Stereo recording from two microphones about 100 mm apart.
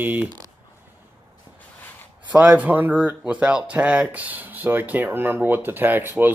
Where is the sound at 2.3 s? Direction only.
15° right (ahead or behind).